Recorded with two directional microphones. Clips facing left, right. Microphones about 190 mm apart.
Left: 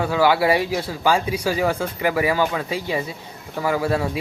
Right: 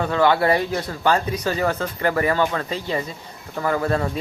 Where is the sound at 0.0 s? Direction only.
5° left (ahead or behind).